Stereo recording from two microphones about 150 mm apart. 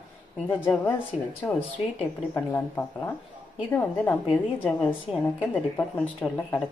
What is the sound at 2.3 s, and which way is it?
Speech, 15° left (ahead or behind).